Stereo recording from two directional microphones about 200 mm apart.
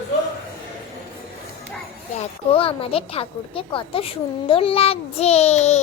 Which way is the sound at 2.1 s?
30° left (ahead or behind).